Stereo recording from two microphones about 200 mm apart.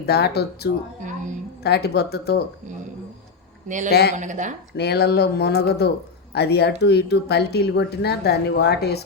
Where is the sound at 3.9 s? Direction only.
55° left (ahead or behind).